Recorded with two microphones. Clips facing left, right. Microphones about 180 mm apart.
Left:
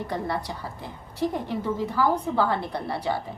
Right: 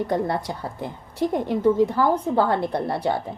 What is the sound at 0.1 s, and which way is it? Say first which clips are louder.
A woman's voice: right 5 dB; 50° right (ahead or behind).